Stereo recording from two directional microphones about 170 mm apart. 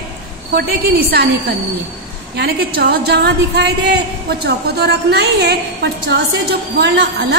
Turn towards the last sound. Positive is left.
turn(degrees=-80)